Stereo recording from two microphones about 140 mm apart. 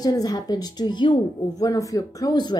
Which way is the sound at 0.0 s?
25° left (ahead or behind).